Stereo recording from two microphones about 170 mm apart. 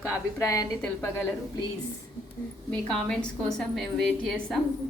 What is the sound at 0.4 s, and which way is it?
Speech, 20° left (ahead or behind).